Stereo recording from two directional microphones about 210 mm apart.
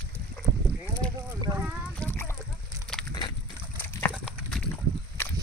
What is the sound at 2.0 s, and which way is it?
Splash, 10° left (ahead or behind).